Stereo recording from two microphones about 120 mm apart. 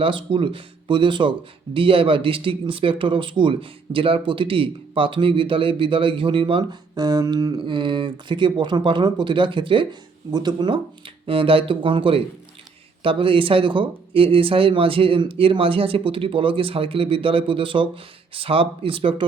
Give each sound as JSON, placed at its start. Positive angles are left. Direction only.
{"t": 0.0, "sound": "speech", "side_deg": -45}
{"t": 7.7, "sound": "speech", "side_deg": -45}
{"t": 11.3, "sound": "speech", "side_deg": -50}